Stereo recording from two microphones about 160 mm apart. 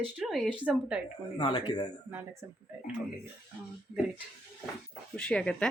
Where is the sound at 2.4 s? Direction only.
10° right (ahead or behind).